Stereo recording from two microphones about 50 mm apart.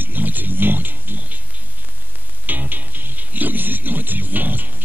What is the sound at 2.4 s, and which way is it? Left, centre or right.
Music, right.